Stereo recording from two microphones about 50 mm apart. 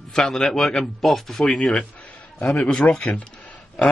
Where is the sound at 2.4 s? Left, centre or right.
Centre.